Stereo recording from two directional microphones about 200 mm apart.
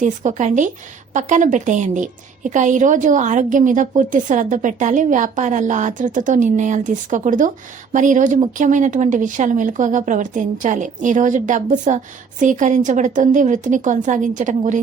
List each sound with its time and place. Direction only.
0.0 s a woman's voice: 40° right (ahead or behind)